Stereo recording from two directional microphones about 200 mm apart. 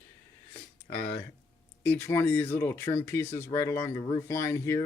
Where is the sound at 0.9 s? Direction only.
10° left (ahead or behind).